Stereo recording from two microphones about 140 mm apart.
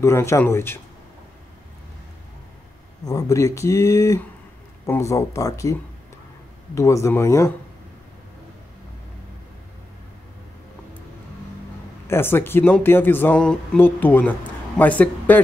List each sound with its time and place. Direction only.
0.0 s speech: 20° left (ahead or behind)
3.1 s speech: 25° left (ahead or behind)
12.1 s speech: 15° left (ahead or behind)